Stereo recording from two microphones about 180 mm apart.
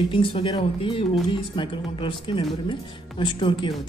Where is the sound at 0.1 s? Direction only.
30° left (ahead or behind).